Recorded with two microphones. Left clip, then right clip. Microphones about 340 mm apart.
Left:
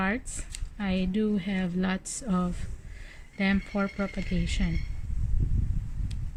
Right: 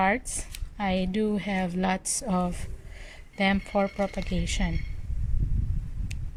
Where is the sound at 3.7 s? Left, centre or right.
Right.